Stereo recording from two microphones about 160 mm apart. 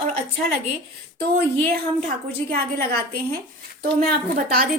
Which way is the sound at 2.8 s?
75° right (ahead or behind).